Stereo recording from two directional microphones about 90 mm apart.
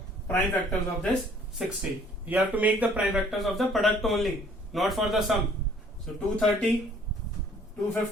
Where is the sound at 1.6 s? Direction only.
5° right (ahead or behind).